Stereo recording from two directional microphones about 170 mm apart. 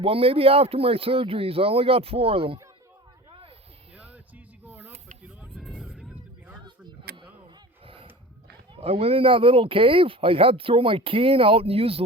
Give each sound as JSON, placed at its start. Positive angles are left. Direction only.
{"t": 0.0, "sound": "speech", "side_deg": -35}
{"t": 3.9, "sound": "music", "side_deg": -10}
{"t": 4.6, "sound": "snake", "side_deg": -10}
{"t": 5.4, "sound": "vehicle", "side_deg": 0}
{"t": 7.1, "sound": "a sound", "side_deg": -65}
{"t": 7.9, "sound": "dog", "side_deg": -30}
{"t": 8.7, "sound": "speech", "side_deg": -35}